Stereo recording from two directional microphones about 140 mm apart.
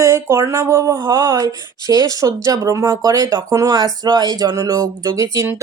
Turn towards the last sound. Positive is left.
turn(degrees=-20)  # may be behind; listen again after turning